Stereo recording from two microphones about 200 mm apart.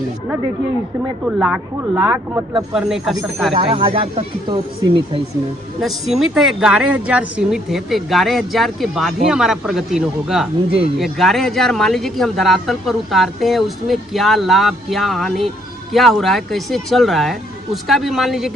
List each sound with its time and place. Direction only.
1.2 s speech: 5° right (ahead or behind)
2.0 s speech: 20° right (ahead or behind)
2.7 s speech: centre (ahead or behind)
3.5 s speech: 30° right (ahead or behind)
5.8 s speech: centre (ahead or behind)